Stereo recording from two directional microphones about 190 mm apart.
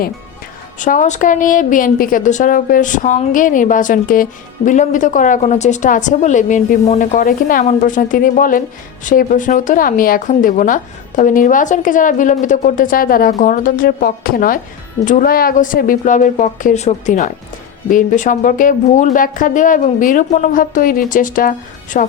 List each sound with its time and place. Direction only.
0.8 s a woman's voice: 40° left (ahead or behind)